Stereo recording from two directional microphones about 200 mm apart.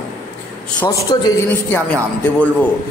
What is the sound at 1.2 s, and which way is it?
Speech, 10° left (ahead or behind).